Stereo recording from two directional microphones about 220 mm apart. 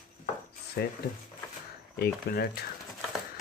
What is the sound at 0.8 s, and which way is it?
Speech, 50° left (ahead or behind).